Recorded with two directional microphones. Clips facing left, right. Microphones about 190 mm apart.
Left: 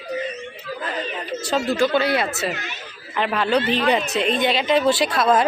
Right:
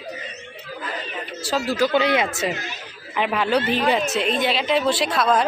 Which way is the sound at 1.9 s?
20° right (ahead or behind).